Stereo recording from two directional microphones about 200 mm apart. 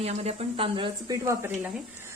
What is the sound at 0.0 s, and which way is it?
Speech, 30° right (ahead or behind).